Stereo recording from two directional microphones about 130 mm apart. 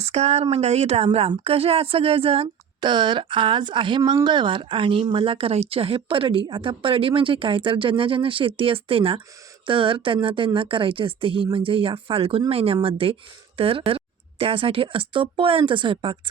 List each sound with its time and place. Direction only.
0.0 s a woman's voice: 55° right (ahead or behind); by 16.3 s 40° right (ahead or behind)